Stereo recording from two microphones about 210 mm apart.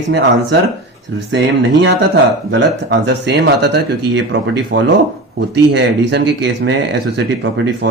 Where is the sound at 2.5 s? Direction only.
60° right (ahead or behind).